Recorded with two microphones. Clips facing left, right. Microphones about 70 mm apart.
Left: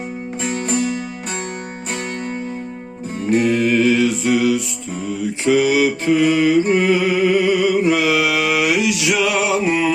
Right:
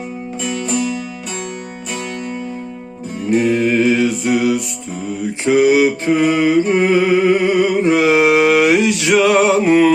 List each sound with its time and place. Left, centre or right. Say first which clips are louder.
0.4 s music: right 1 dB; left
3.3 s mantra: right 2 dB; right